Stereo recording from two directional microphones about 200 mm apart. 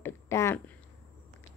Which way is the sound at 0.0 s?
15° left (ahead or behind).